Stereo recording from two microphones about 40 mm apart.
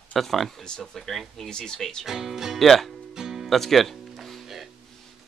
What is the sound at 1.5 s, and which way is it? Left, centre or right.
Speech, centre.